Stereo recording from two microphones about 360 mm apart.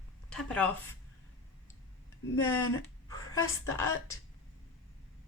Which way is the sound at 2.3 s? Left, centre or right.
Centre.